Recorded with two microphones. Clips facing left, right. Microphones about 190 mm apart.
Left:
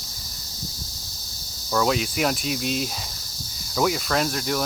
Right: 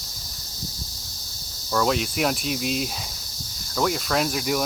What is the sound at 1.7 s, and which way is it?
Cricket, centre (ahead or behind).